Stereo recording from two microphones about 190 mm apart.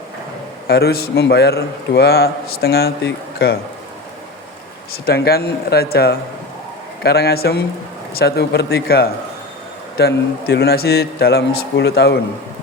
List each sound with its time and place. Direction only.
0.7 s a man's voice: 55° left (ahead or behind)
4.9 s a man's voice: 55° left (ahead or behind)